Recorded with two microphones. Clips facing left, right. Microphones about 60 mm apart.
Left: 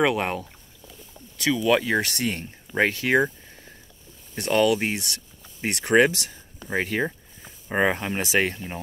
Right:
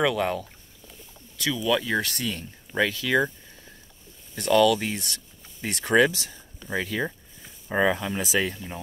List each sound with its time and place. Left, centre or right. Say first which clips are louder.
0.0 s speech: left 1 dB; left
2.0 s speech: left 3 dB; left
4.4 s speech: right 1 dB; left